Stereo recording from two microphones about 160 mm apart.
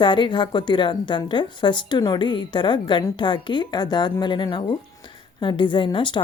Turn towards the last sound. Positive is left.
turn(degrees=30)  # may be behind; listen again after turning